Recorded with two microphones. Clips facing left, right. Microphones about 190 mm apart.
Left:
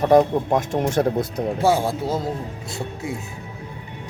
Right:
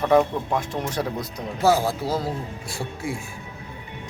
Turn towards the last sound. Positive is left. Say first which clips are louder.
# left 1 dB
turn(degrees=20)  # may be behind; listen again after turning